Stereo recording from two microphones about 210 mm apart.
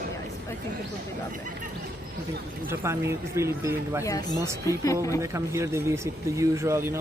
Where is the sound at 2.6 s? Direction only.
10° right (ahead or behind).